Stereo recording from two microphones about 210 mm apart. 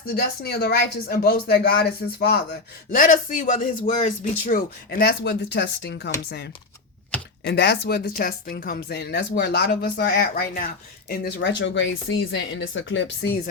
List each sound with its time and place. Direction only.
0.1 s speech: 50° left (ahead or behind)